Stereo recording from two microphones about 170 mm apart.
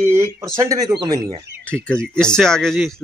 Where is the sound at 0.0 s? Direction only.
15° right (ahead or behind).